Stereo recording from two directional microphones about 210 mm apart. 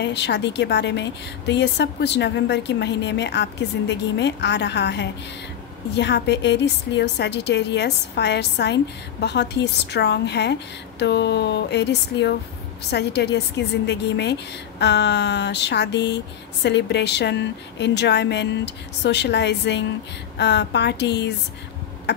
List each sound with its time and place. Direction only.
0.0 s a woman's voice: 55° left (ahead or behind)